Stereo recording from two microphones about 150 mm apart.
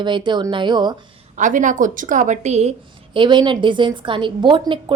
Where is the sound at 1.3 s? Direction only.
60° right (ahead or behind).